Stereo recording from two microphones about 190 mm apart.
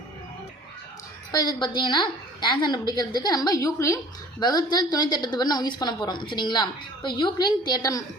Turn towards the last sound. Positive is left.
turn(degrees=20)  # may be behind; listen again after turning